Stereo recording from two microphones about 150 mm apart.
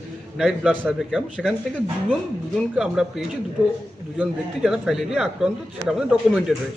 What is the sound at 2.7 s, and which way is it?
Speech, 5° right (ahead or behind).